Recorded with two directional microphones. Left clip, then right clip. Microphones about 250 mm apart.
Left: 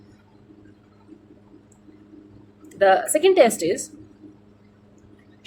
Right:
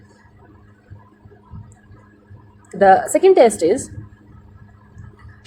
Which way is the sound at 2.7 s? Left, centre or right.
Right.